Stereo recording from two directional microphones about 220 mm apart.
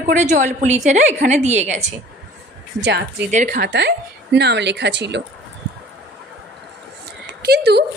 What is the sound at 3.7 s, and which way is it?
A woman's voice, 50° right (ahead or behind).